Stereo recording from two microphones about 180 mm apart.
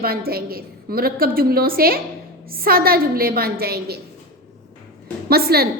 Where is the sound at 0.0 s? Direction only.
55° right (ahead or behind).